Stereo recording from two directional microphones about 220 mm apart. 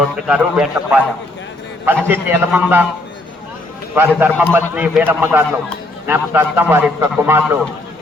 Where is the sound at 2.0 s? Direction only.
10° right (ahead or behind).